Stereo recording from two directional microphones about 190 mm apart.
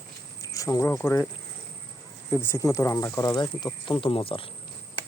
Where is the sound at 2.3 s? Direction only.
15° left (ahead or behind); by 4.4 s 30° left (ahead or behind).